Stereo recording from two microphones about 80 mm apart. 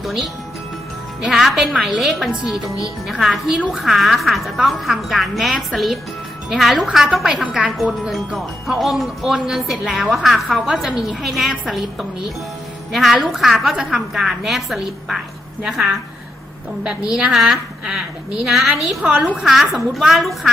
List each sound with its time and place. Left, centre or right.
0.0 s speech: centre
16.8 s a woman's voice: centre
19.0 s a woman's voice: centre
19.4 s speech: centre